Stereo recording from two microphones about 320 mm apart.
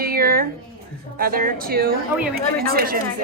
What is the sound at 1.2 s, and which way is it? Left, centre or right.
Speech, right.